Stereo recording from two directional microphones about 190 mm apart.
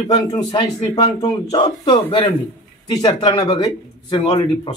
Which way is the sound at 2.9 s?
20° left (ahead or behind).